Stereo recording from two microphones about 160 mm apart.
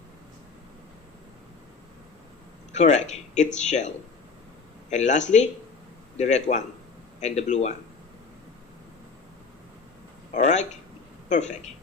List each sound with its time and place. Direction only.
2.7 s speech: 45° left (ahead or behind)
10.3 s speech: 45° left (ahead or behind)